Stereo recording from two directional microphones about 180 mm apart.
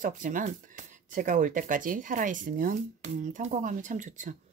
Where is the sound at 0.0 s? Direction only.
45° right (ahead or behind).